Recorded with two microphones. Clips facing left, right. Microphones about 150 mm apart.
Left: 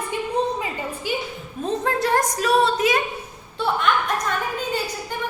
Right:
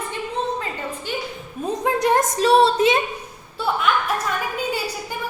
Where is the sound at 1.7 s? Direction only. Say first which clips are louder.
Right 2 dB; 15° right (ahead or behind).